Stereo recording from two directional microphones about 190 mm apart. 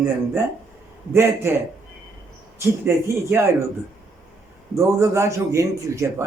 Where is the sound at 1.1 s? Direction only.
15° right (ahead or behind).